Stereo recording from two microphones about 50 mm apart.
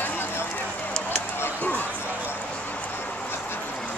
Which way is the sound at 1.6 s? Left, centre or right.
Left.